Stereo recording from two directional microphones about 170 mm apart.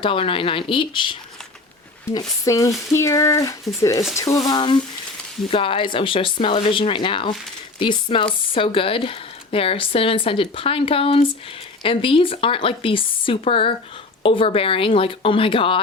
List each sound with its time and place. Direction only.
0.0 s speech: 30° left (ahead or behind)
2.1 s speech: 20° left (ahead or behind)